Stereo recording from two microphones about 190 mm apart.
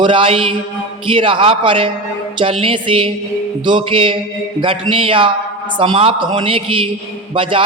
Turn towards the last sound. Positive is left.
turn(degrees=-25)  # may be behind; listen again after turning